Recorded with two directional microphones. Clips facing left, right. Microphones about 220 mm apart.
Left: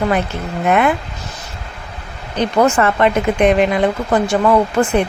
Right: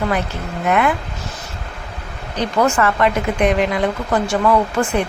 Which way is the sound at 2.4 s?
20° left (ahead or behind).